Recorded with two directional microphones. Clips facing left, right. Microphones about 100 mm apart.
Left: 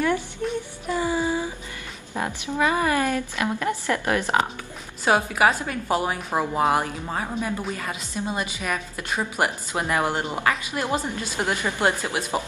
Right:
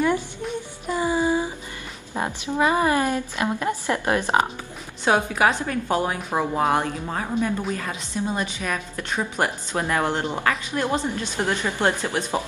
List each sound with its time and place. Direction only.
0.4 s child singing: 10° right (ahead or behind)
0.8 s a sound: 20° right (ahead or behind)
2.5 s speech: 25° right (ahead or behind)
5.0 s a woman's voice: 5° left (ahead or behind)